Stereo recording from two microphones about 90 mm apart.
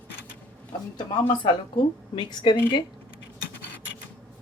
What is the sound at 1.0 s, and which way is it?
A woman's voice, 65° left (ahead or behind).